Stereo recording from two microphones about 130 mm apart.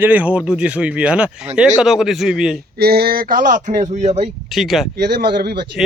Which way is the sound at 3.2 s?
90° right.